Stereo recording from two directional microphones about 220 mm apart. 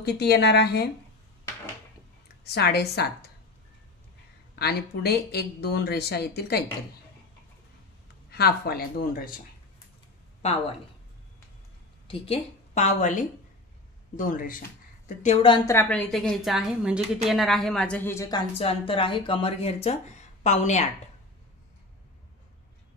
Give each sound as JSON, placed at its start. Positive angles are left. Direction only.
{"t": 0.0, "sound": "speech", "side_deg": 50}
{"t": 2.4, "sound": "speech", "side_deg": 50}
{"t": 4.6, "sound": "speech", "side_deg": 45}
{"t": 8.3, "sound": "speech", "side_deg": 45}
{"t": 10.4, "sound": "speech", "side_deg": 30}
{"t": 12.1, "sound": "a woman's voice", "side_deg": 30}
{"t": 15.4, "sound": "a woman's voice", "side_deg": 15}
{"t": 18.6, "sound": "speech", "side_deg": 25}